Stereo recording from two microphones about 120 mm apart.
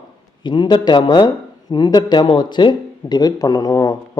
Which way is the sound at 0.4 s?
40° left (ahead or behind).